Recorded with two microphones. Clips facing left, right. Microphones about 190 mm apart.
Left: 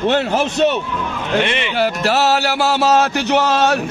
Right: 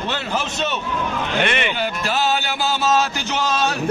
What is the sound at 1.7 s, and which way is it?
A man's voice, 75° left (ahead or behind).